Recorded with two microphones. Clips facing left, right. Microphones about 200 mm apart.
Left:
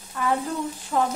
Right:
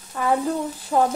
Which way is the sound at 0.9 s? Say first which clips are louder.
Right 4 dB; 40° right (ahead or behind).